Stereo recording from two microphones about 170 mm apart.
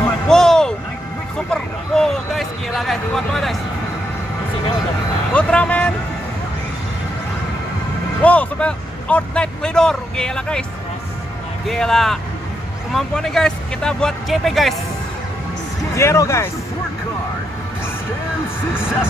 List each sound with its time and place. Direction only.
0.3 s music: 5° left (ahead or behind)
1.5 s a sound: centre (ahead or behind)
5.3 s vehicle: 5° left (ahead or behind)
8.2 s speech: 10° left (ahead or behind)
11.6 s speech: centre (ahead or behind)
16.0 s speech: 15° left (ahead or behind)